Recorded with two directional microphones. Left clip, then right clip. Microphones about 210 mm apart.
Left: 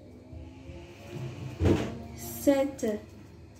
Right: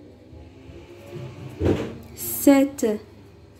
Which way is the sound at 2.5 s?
50° right (ahead or behind).